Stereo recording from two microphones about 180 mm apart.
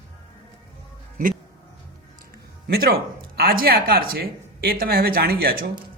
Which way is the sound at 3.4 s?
55° right (ahead or behind).